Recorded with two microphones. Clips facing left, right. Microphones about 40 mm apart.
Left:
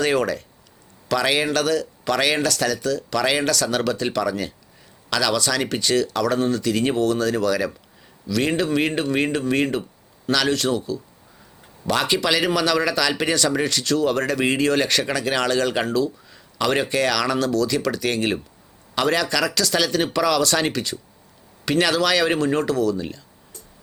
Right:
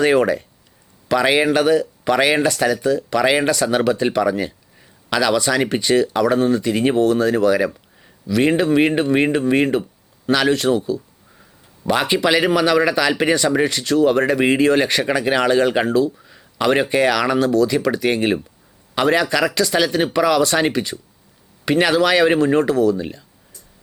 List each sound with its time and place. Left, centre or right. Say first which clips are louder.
0.0 s speech: right 5 dB; centre